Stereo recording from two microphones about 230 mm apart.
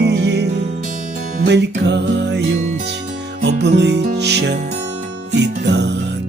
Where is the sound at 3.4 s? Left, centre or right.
Right.